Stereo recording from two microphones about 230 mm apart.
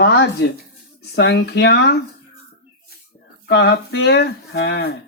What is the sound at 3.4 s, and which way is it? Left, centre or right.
Speech, left.